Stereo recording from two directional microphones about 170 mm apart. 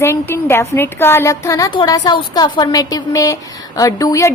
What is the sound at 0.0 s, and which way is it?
A woman's voice, 15° left (ahead or behind).